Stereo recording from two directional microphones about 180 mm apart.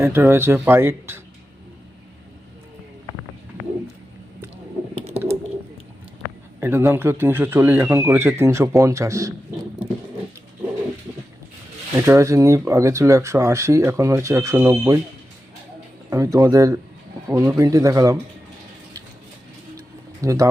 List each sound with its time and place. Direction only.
0.0 s speech: 15° right (ahead or behind)
6.6 s speech: 10° right (ahead or behind)
11.9 s speech: 15° right (ahead or behind)
16.0 s speech: 20° right (ahead or behind)
20.2 s speech: 20° right (ahead or behind)